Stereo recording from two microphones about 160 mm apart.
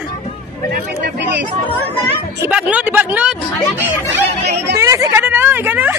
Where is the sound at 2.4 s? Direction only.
10° right (ahead or behind).